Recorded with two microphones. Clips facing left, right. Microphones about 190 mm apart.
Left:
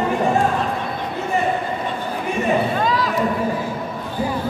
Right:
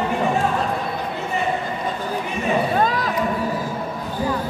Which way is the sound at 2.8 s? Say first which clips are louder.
Even; 50° right (ahead or behind).